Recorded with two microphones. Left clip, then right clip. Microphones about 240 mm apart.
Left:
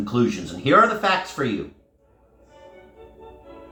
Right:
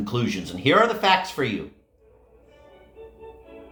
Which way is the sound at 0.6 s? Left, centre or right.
Right.